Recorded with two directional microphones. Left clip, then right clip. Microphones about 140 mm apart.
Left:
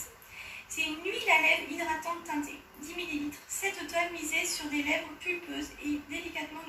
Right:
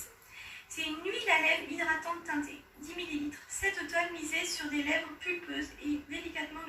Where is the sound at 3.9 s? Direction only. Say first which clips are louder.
Left 2 dB; 25° right (ahead or behind).